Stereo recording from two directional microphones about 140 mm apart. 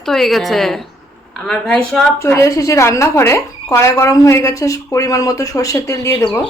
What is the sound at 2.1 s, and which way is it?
Speech, 20° left (ahead or behind).